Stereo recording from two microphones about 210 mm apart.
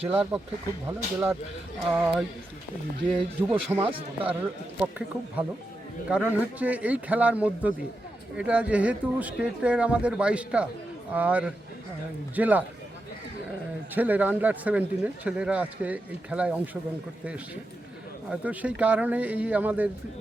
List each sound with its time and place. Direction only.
0.1 s speech: 5° right (ahead or behind)
3.5 s speech: 10° right (ahead or behind)
3.8 s speech: 25° right (ahead or behind)
4.8 s speech: 5° right (ahead or behind)
13.9 s speech: 10° right (ahead or behind)